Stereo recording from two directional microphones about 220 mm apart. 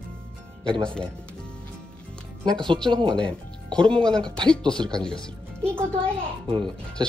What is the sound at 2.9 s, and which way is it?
Speech, 20° right (ahead or behind).